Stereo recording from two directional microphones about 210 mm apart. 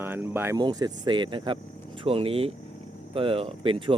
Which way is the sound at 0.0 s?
10° right (ahead or behind).